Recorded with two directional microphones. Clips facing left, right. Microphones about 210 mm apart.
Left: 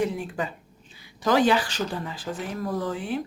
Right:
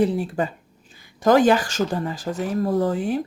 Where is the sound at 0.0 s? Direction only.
35° right (ahead or behind).